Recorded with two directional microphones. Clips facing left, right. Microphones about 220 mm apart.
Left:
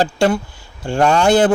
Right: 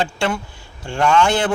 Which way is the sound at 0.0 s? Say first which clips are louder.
Left 6 dB; 40° left (ahead or behind).